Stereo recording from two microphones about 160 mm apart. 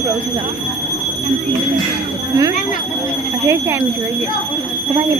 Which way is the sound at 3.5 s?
15° right (ahead or behind).